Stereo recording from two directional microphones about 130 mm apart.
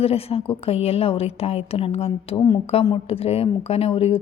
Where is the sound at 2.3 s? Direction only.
30° left (ahead or behind).